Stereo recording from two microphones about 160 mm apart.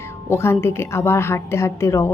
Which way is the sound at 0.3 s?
15° left (ahead or behind).